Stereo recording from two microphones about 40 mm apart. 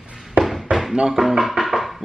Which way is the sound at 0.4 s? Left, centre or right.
Right.